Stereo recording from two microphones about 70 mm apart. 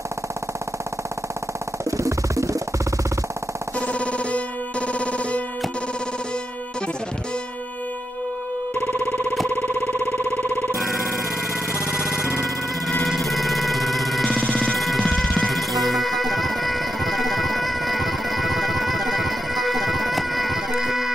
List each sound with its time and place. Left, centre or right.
1.9 s music: right
3.8 s music: centre
8.7 s a sound: left
10.8 s a sound: centre
11.8 s music: centre
13.0 s music: centre
14.3 s music: centre
14.8 s music: centre